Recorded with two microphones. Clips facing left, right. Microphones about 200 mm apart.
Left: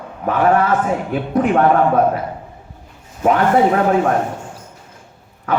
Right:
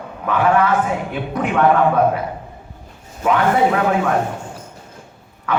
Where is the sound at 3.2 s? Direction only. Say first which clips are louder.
Left 2 dB; 40° left (ahead or behind).